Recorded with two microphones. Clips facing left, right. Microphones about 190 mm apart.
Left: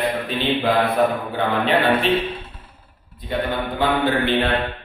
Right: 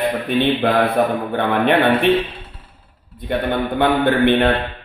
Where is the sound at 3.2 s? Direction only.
60° right (ahead or behind).